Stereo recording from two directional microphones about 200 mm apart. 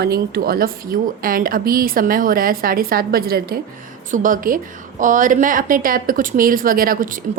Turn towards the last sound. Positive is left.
turn(degrees=-45)  # may be behind; listen again after turning